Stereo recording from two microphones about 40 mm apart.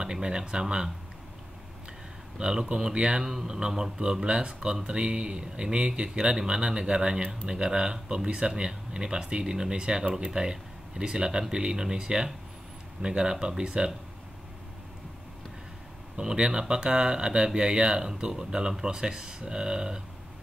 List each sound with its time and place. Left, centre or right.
0.0 s speech: centre
2.3 s speech: right
16.2 s speech: centre